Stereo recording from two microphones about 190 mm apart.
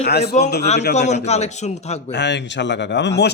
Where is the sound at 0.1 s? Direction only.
60° left (ahead or behind).